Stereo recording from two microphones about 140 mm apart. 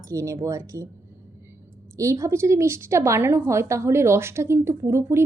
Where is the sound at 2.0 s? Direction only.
20° right (ahead or behind).